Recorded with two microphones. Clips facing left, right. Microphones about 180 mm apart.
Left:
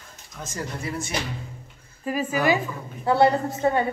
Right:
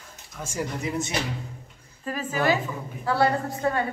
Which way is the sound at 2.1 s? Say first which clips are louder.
Left 5 dB; 10° left (ahead or behind).